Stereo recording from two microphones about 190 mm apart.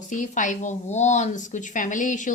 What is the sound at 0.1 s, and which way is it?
Speech, 40° left (ahead or behind).